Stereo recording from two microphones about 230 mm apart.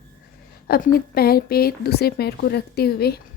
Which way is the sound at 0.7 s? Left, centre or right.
Left.